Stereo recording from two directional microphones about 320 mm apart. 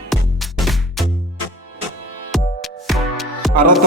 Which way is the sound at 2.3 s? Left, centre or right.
Centre.